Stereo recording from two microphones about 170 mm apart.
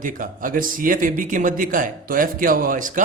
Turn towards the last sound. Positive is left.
turn(degrees=-50)  # may be behind; listen again after turning